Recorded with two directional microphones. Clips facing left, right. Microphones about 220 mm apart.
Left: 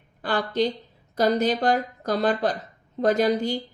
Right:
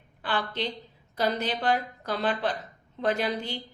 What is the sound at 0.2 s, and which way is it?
A woman's voice, 40° left (ahead or behind).